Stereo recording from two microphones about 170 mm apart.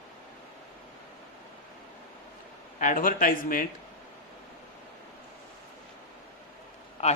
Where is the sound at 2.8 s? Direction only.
55° left (ahead or behind).